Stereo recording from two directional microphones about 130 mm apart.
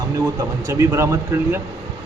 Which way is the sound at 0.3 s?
20° right (ahead or behind).